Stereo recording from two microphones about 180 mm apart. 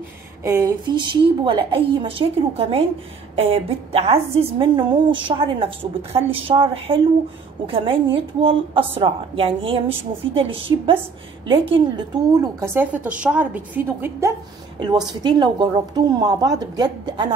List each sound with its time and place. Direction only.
0.4 s a woman's voice: 15° right (ahead or behind)
12.5 s a woman's voice: 15° right (ahead or behind)
14.8 s a woman's voice: 25° right (ahead or behind)